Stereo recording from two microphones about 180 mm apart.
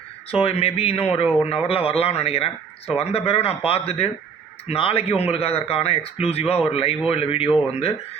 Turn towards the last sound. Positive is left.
turn(degrees=35)  # may be behind; listen again after turning